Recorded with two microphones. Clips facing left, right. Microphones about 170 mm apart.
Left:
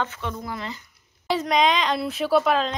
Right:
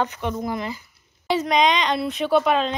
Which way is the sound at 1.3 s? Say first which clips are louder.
Right 1 dB; centre (ahead or behind).